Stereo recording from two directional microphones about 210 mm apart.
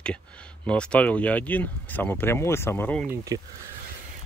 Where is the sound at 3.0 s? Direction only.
15° right (ahead or behind).